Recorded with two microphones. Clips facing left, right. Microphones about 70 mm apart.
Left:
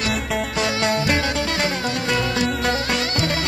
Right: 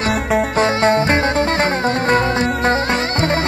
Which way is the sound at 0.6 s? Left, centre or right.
Right.